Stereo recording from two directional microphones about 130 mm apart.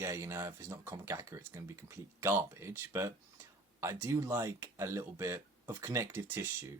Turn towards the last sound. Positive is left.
turn(degrees=-20)  # may be behind; listen again after turning